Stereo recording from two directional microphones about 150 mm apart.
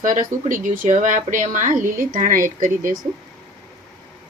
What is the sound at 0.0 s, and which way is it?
Speech, 60° right (ahead or behind).